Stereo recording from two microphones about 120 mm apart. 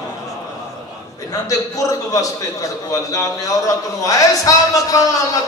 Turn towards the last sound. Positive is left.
turn(degrees=30)  # may be behind; listen again after turning